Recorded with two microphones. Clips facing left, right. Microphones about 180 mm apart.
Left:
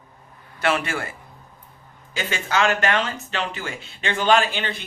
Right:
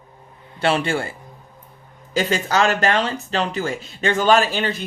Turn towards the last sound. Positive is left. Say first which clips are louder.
# right 3 dB
turn(degrees=-40)  # may be behind; listen again after turning